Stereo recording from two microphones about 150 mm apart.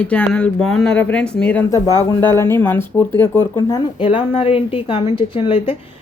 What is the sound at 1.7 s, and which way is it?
A man's voice, 20° left (ahead or behind).